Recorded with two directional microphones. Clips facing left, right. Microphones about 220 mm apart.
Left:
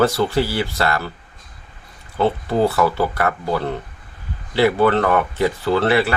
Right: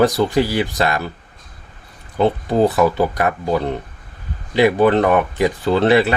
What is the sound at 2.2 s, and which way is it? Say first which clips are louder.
Speech: right 2 dB; 15° right (ahead or behind).